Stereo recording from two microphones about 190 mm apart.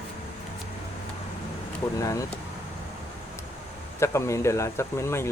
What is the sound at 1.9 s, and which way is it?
Speech, 15° left (ahead or behind).